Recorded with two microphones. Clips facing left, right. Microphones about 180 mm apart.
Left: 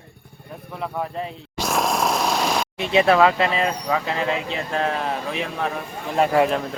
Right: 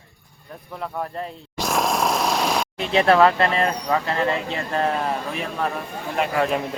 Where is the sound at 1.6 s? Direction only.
Centre (ahead or behind).